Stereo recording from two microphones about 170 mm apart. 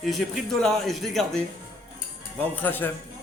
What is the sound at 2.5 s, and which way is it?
Speech, 10° left (ahead or behind).